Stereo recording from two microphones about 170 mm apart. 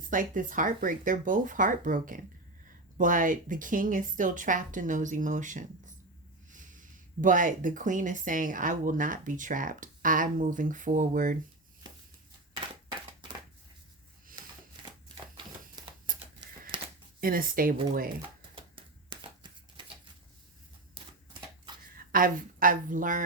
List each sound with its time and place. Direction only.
0.1 s speech: 50° right (ahead or behind)
15.7 s a sound: 25° right (ahead or behind)
17.2 s speech: 55° right (ahead or behind)
18.5 s shuffling cards: 30° right (ahead or behind)
21.0 s shuffling cards: 35° right (ahead or behind)
21.9 s a woman's voice: 55° right (ahead or behind)